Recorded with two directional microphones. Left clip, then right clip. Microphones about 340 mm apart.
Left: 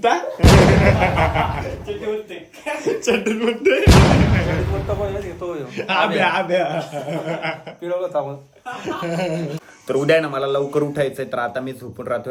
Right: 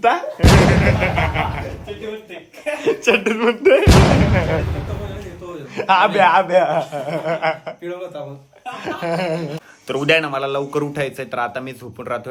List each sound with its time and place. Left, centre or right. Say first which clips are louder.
0.0 s a woman's voice: right 1 dB; centre
3.1 s speech: right 4 dB; centre
3.6 s speech: right 2 dB; centre
8.8 s speech: right 2 dB; centre